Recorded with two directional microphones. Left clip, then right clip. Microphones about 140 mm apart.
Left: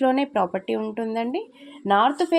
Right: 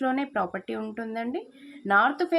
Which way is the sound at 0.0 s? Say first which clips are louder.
Left 6 dB; 40° left (ahead or behind).